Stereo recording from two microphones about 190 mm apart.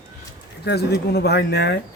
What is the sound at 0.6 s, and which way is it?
Speech, 60° left (ahead or behind).